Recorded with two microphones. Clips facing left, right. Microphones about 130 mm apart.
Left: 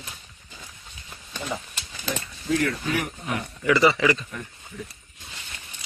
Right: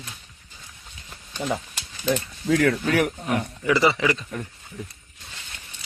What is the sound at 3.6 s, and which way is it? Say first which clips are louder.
Speech: left 1 dB; 25° right (ahead or behind).